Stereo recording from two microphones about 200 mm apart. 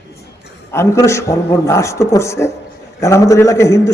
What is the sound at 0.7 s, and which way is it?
A man's voice, 15° left (ahead or behind).